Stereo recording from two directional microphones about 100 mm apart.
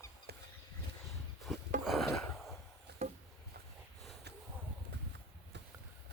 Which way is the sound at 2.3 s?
Centre (ahead or behind).